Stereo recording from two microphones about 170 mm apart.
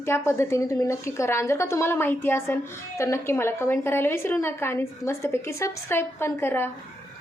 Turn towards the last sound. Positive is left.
turn(degrees=15)  # may be behind; listen again after turning